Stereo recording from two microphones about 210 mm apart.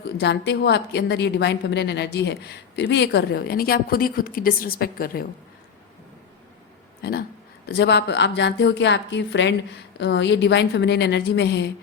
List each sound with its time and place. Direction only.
0.2 s a woman's voice: 55° left (ahead or behind)
7.0 s a woman's voice: 45° left (ahead or behind)